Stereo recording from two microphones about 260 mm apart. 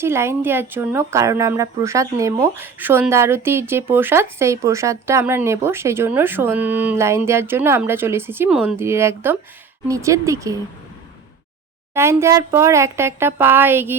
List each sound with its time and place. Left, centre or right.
0.0 s speech: centre
11.9 s speech: centre